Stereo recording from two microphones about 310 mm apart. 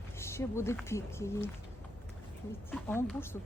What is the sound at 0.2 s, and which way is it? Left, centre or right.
A woman's voice, centre.